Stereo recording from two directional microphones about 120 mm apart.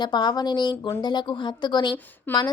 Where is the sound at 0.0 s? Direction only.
40° left (ahead or behind).